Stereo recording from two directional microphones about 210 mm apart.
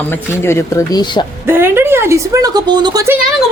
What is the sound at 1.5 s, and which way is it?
Speech, 10° right (ahead or behind).